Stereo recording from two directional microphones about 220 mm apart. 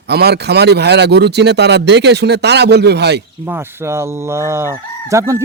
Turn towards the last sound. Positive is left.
turn(degrees=-15)  # may be behind; listen again after turning